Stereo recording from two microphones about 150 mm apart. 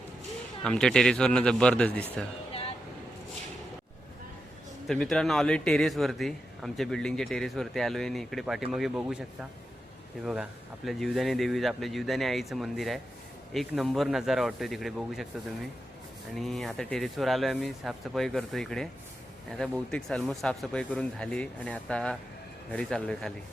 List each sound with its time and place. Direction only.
0.6 s a man's voice: 5° left (ahead or behind)
2.5 s vehicle: 40° left (ahead or behind)
4.9 s a man's voice: 5° left (ahead or behind)
16.3 s a man's voice: centre (ahead or behind)